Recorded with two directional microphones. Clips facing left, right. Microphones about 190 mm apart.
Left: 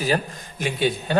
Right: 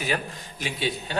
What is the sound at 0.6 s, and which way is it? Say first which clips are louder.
Speech: left 6 dB; 55° left (ahead or behind).